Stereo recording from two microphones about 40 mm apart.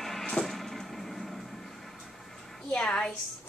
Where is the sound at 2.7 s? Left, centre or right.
Left.